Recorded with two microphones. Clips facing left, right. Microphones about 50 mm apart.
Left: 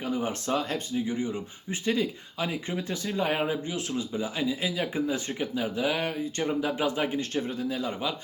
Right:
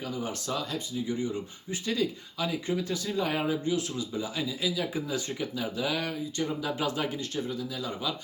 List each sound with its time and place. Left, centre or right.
0.0 s speech: left
1.0 s speech: left
7.2 s speech: left